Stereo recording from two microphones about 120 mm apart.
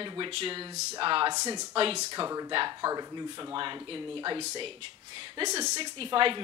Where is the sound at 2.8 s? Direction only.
35° right (ahead or behind).